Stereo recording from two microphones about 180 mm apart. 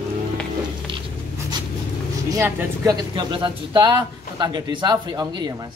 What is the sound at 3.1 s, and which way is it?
Speech, 25° right (ahead or behind).